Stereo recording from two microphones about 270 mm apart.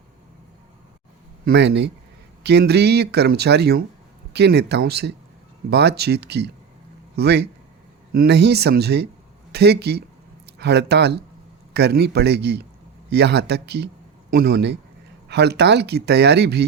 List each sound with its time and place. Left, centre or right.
1.5 s speech: right